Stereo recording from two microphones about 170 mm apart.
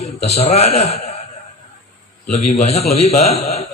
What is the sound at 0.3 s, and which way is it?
Speech, 40° left (ahead or behind).